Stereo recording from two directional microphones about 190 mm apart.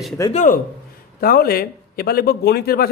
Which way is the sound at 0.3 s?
40° left (ahead or behind).